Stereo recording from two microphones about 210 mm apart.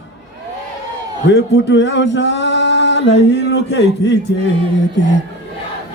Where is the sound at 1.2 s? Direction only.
55° left (ahead or behind).